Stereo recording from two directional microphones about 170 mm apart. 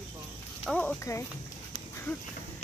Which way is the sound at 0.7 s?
5° left (ahead or behind).